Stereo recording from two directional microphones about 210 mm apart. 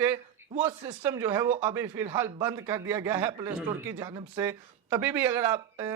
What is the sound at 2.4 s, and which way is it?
A man's voice, 10° right (ahead or behind).